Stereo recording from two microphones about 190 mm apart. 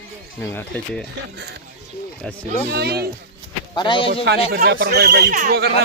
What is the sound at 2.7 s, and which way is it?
Speech, 60° right (ahead or behind).